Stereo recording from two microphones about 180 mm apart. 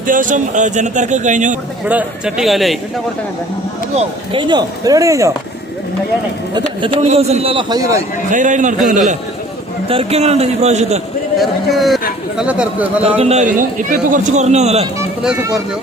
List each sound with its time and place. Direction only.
0.1 s speech: 45° right (ahead or behind)
1.9 s a man's voice: 5° right (ahead or behind)
3.9 s a man's voice: 30° right (ahead or behind)
6.5 s a man's voice: 30° right (ahead or behind)
8.3 s speech: 45° right (ahead or behind)
9.9 s a man's voice: 35° right (ahead or behind)
11.3 s a man's voice: centre (ahead or behind)
13.1 s a man's voice: 35° right (ahead or behind)